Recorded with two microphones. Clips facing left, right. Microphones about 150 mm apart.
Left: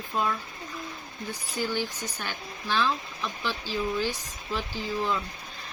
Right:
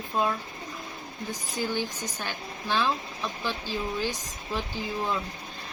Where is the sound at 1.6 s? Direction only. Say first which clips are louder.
Even; 15° right (ahead or behind).